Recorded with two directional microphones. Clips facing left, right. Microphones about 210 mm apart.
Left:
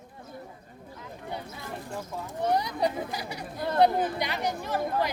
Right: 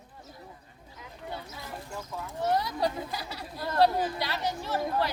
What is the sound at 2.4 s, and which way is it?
Chatter, 15° left (ahead or behind).